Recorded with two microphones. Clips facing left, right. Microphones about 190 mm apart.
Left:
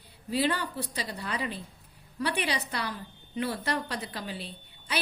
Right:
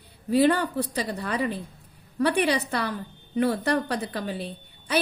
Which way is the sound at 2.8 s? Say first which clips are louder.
Right 6 dB; 50° right (ahead or behind).